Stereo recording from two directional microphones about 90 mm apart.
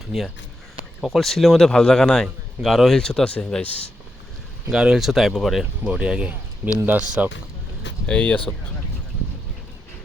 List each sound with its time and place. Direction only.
1.0 s a man's voice: centre (ahead or behind)
4.7 s a man's voice: 10° right (ahead or behind)
8.0 s speech: 10° left (ahead or behind)